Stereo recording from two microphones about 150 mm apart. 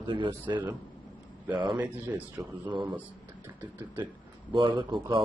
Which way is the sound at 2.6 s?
30° right (ahead or behind).